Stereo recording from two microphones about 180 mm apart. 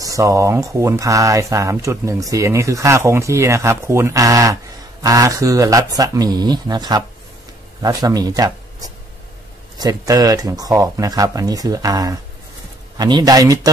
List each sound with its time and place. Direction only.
0.0 s speech: 20° right (ahead or behind)